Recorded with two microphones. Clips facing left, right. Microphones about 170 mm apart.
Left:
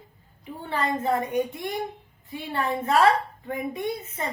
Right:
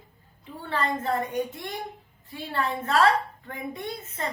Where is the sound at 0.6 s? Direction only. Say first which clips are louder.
Left 2 dB; 15° left (ahead or behind).